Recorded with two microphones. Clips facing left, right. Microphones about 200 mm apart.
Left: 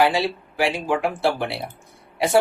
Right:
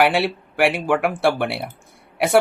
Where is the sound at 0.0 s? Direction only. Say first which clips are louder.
Right 2 dB; 70° right (ahead or behind).